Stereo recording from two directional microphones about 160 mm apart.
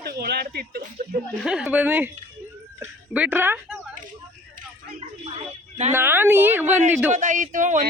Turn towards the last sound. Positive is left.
turn(degrees=-50)  # may be behind; listen again after turning